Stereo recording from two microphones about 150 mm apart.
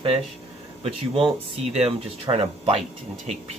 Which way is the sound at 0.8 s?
40° right (ahead or behind).